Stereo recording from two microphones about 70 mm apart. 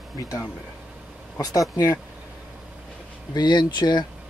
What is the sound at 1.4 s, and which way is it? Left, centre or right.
Speech, left.